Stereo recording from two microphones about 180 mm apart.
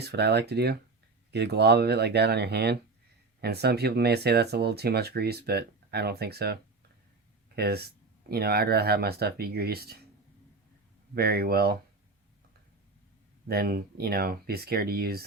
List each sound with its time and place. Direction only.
0.0 s speech: 65° right (ahead or behind)
11.1 s speech: 60° right (ahead or behind)
13.5 s speech: 60° right (ahead or behind)